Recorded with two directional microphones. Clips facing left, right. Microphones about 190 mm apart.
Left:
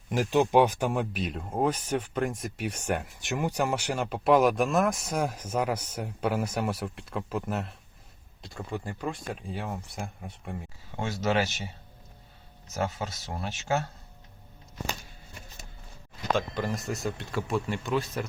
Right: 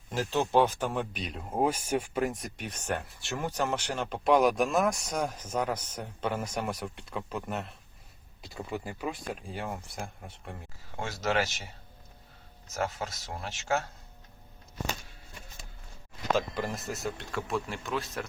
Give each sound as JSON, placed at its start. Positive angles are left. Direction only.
{"t": 0.1, "sound": "speech", "side_deg": 15}
{"t": 10.2, "sound": "a sound", "side_deg": 0}
{"t": 11.0, "sound": "speech", "side_deg": 20}
{"t": 12.8, "sound": "speech", "side_deg": 25}
{"t": 16.6, "sound": "speech", "side_deg": 0}